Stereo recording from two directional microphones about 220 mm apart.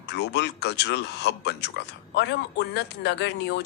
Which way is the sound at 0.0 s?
50° left (ahead or behind).